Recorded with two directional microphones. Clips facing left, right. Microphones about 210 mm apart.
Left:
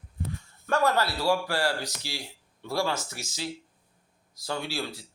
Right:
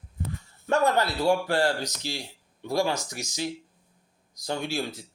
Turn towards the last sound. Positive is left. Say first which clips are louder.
# right 3 dB
turn(degrees=-20)  # may be behind; listen again after turning